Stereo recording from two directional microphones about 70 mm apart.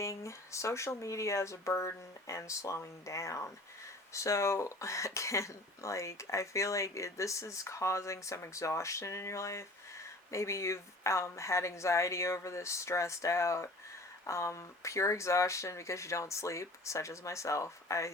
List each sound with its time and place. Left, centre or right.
0.0 s speech: left